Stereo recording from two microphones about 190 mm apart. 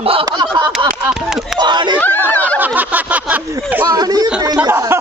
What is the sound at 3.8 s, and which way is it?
Speech, 20° right (ahead or behind).